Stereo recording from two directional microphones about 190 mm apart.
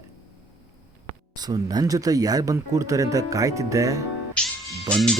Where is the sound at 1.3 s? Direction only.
20° right (ahead or behind).